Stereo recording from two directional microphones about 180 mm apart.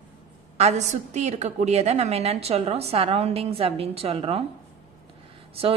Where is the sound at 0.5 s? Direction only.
40° right (ahead or behind).